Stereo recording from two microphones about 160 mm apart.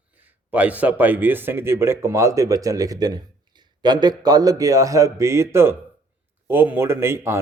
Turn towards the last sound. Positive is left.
turn(degrees=-15)  # may be behind; listen again after turning